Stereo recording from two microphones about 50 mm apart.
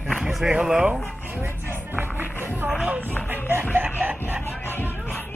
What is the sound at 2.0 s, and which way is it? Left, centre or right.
Music, right.